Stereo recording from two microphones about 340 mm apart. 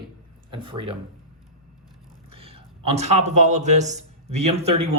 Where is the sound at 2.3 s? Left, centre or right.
Centre.